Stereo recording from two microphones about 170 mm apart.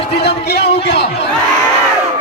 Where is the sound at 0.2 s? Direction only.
80° left.